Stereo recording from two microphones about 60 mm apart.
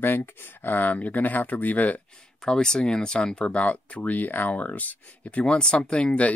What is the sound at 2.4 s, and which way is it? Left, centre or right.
Speech, centre.